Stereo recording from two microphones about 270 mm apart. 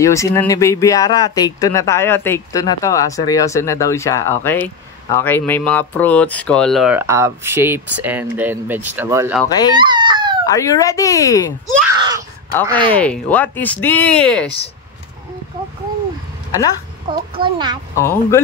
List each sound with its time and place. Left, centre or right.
0.0 s speech: centre
9.4 s speech: centre
9.8 s a sound: centre
10.5 s speech: centre
11.9 s a sound: centre
12.6 s a child's voice: centre
12.9 s speech: centre
17.1 s a child's voice: centre
17.9 s speech: centre